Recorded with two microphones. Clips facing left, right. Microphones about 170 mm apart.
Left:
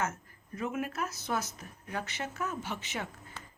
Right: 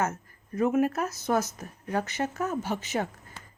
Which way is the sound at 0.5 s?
45° right (ahead or behind).